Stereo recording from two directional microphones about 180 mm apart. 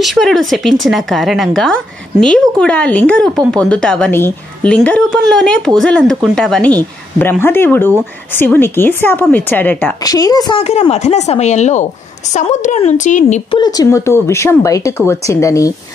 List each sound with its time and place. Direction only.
0.0 s a woman's voice: centre (ahead or behind); by 10.6 s 20° left (ahead or behind)
10.6 s speech: 35° left (ahead or behind)
13.5 s a woman's voice: 20° left (ahead or behind)